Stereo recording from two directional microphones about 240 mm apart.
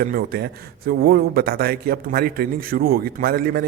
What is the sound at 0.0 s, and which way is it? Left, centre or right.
A man's voice, right.